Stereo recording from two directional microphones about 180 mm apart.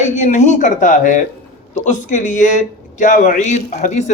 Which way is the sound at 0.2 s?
40° left (ahead or behind).